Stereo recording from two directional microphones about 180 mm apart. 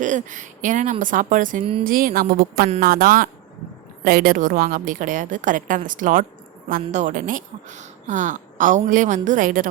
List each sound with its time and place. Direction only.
0.0 s a woman's voice: 45° right (ahead or behind)